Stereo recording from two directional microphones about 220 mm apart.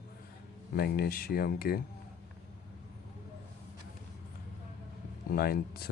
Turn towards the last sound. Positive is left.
turn(degrees=45)  # may be behind; listen again after turning